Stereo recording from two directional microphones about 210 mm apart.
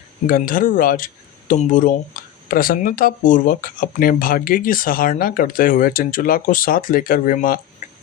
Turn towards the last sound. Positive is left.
turn(degrees=40)  # may be behind; listen again after turning